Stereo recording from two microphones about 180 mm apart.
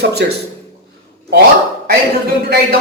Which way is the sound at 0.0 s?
65° right (ahead or behind).